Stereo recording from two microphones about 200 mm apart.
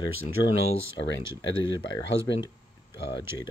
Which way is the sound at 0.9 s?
60° left (ahead or behind).